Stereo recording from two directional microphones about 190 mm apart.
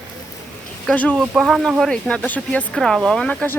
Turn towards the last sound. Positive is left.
turn(degrees=5)  # may be behind; listen again after turning